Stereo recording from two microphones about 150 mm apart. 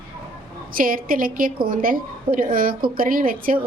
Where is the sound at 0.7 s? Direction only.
70° right (ahead or behind).